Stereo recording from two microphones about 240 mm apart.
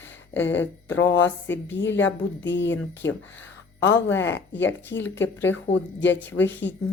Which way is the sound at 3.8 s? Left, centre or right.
Left.